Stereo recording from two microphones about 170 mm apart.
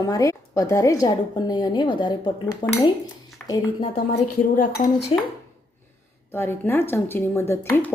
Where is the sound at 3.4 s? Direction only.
5° left (ahead or behind).